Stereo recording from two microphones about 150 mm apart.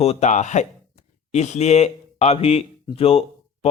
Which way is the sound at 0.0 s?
45° left (ahead or behind).